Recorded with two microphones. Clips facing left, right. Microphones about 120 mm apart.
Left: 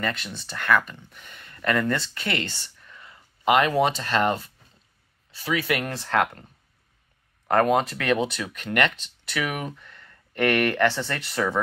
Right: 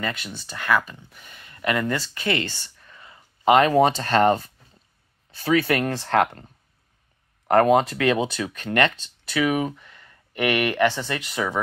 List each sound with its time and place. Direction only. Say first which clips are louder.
0.0 s speech: even; 10° right (ahead or behind); by 3.5 s 25° right (ahead or behind)
3.5 s speech: right 4 dB; 35° right (ahead or behind)
5.4 s speech: right 5 dB; 35° right (ahead or behind)
7.4 s speech: right 3 dB; 25° right (ahead or behind)